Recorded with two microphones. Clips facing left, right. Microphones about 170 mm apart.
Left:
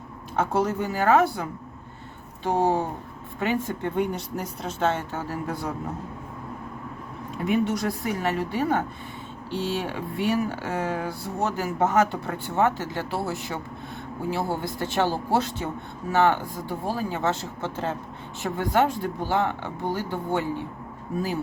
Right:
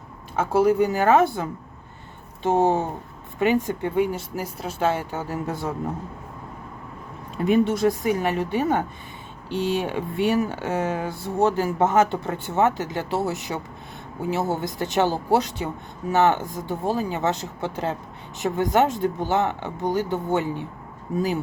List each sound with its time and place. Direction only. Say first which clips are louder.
0.3 s speech: right 5 dB; 10° right (ahead or behind)
3.9 s speech: right 4 dB; 5° right (ahead or behind)
7.5 s speech: right 5 dB; 30° right (ahead or behind)